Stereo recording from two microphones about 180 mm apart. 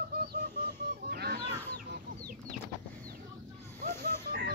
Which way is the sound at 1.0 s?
60° right (ahead or behind).